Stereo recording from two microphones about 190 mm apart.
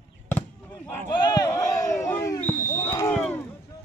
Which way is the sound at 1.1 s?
25° left (ahead or behind).